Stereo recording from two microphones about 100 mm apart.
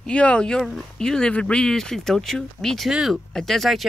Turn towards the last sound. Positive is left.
turn(degrees=0)  # may be behind; listen again after turning